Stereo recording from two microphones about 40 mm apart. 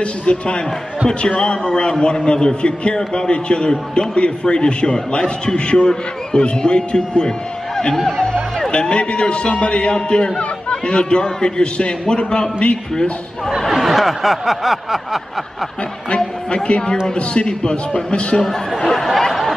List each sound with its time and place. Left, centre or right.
0.0 s a man's voice: left
13.7 s snicker: centre
16.4 s a man's voice: left
18.4 s speech: centre